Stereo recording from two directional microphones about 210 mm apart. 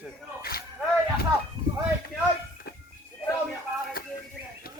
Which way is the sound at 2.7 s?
45° left (ahead or behind).